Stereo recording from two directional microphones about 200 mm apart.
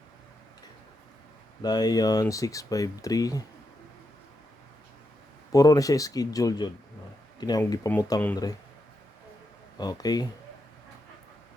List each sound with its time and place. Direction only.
1.6 s speech: 20° left (ahead or behind)
5.5 s speech: 20° left (ahead or behind)
9.7 s speech: 20° left (ahead or behind)